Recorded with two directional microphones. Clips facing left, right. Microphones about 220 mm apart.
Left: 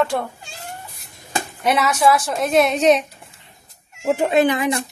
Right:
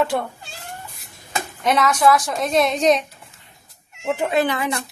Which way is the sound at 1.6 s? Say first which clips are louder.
Even; 10° left (ahead or behind).